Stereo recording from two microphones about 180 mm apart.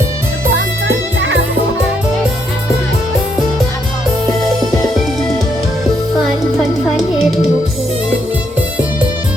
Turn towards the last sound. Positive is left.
turn(degrees=0)  # may be behind; listen again after turning